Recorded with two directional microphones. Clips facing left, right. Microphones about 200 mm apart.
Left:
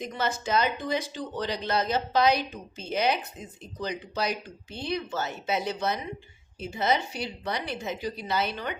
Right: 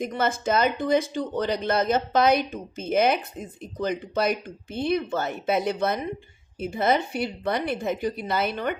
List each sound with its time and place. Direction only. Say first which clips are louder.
0.0 s speech: right 5 dB; 50° right (ahead or behind)